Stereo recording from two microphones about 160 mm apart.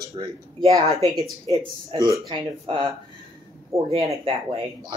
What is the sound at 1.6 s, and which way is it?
Speech, 35° right (ahead or behind).